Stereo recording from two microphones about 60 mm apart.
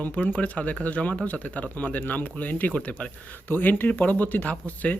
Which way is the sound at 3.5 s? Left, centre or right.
Left.